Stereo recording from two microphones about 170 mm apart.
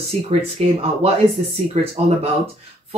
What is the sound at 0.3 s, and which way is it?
Speech, 35° right (ahead or behind).